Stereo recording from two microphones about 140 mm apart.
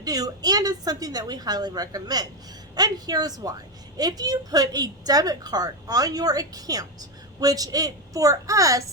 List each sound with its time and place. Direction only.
0.0 s a woman's voice: 25° right (ahead or behind)